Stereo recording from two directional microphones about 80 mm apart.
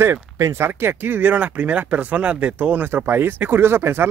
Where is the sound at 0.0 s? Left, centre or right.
Right.